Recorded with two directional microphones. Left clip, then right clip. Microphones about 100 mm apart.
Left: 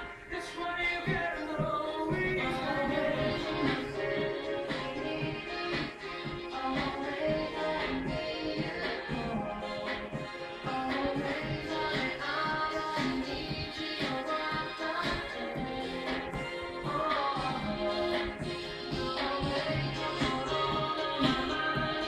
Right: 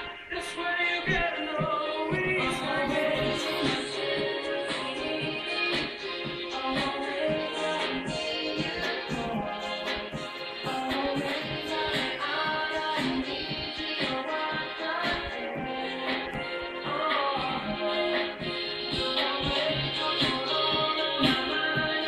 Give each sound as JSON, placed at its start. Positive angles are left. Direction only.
{"t": 20.9, "sound": "music", "side_deg": -15}